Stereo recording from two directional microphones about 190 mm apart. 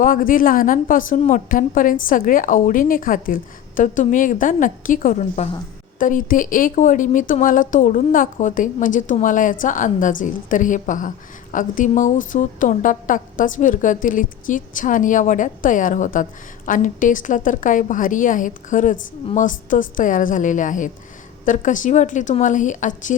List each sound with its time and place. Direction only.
0.0 s a woman's voice: 45° left (ahead or behind)